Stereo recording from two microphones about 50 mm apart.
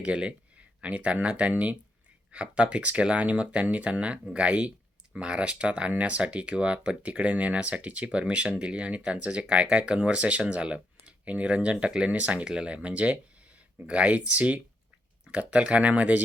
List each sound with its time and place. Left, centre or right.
0.0 s speech: right